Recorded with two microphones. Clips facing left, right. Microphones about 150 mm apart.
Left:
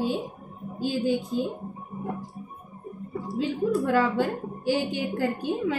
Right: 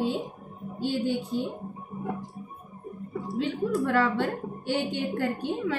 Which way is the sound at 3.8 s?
5° left (ahead or behind).